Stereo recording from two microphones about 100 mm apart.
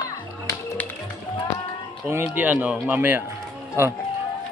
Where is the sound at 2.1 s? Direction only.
20° right (ahead or behind).